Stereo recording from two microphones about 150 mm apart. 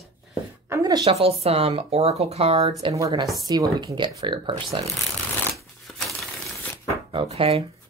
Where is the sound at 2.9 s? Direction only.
20° right (ahead or behind).